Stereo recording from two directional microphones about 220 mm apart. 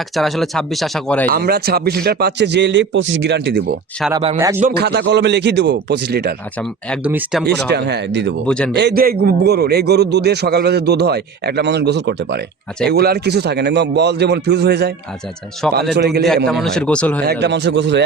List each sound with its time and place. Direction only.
0.2 s speech: centre (ahead or behind)
1.3 s a man's voice: 45° right (ahead or behind)
4.4 s speech: 10° right (ahead or behind)
4.6 s a man's voice: 45° right (ahead or behind)
7.0 s speech: 5° right (ahead or behind)
7.4 s a man's voice: 50° right (ahead or behind)
8.4 s speech: 5° left (ahead or behind)
8.7 s a man's voice: 50° right (ahead or behind)
15.6 s speech: 5° left (ahead or behind)
16.0 s a man's voice: 50° right (ahead or behind)
16.5 s speech: centre (ahead or behind)
17.4 s a man's voice: 55° right (ahead or behind)